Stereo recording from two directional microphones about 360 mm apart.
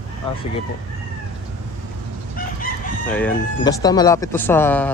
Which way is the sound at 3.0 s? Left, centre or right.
Centre.